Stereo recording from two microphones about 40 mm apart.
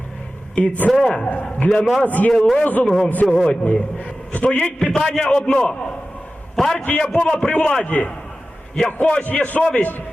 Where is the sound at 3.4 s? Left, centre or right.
Left.